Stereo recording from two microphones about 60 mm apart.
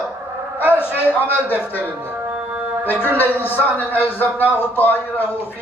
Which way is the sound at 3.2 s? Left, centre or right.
Left.